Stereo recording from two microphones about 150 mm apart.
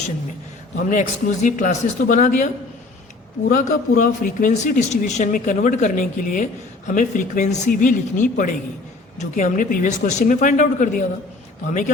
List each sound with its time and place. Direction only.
0.8 s speech: 60° left (ahead or behind)
3.5 s speech: 60° left (ahead or behind)